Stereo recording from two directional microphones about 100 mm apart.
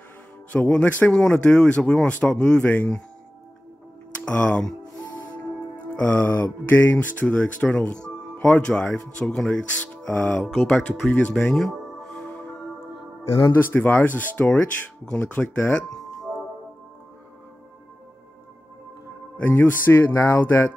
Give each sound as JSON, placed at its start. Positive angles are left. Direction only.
{"t": 0.5, "sound": "speech", "side_deg": 15}
{"t": 4.2, "sound": "speech", "side_deg": 15}
{"t": 5.9, "sound": "speech", "side_deg": 15}
{"t": 10.4, "sound": "speech", "side_deg": 0}
{"t": 11.1, "sound": "music", "side_deg": 15}
{"t": 13.6, "sound": "speech", "side_deg": 20}
{"t": 19.3, "sound": "speech", "side_deg": 20}